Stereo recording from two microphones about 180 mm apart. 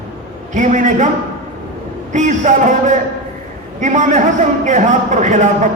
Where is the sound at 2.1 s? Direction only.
45° right (ahead or behind).